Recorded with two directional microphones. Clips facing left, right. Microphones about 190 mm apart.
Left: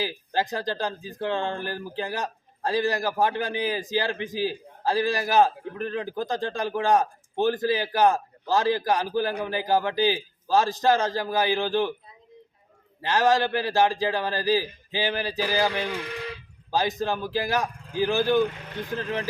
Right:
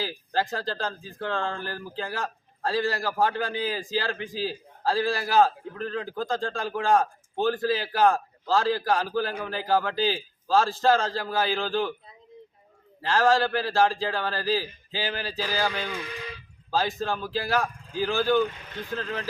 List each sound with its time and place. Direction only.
0.3 s speech: 15° left (ahead or behind)
13.0 s speech: 15° left (ahead or behind)